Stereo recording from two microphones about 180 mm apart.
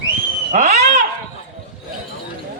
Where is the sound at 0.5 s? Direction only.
40° right (ahead or behind).